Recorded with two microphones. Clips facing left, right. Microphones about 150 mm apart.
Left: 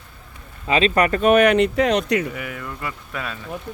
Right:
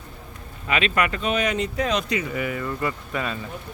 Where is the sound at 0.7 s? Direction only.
35° left (ahead or behind).